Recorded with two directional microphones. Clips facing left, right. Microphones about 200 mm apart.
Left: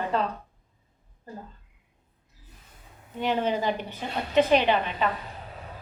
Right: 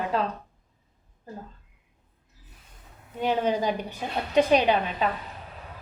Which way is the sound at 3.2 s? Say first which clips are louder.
Right 1 dB; 10° right (ahead or behind).